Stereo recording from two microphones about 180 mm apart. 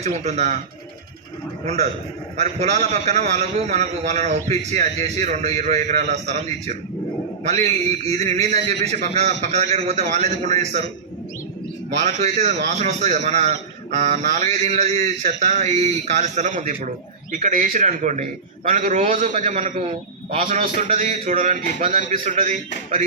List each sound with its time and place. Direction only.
0.0 s a man's voice: 40° right (ahead or behind)
2.4 s a man's voice: 40° right (ahead or behind)
12.0 s a man's voice: 40° right (ahead or behind)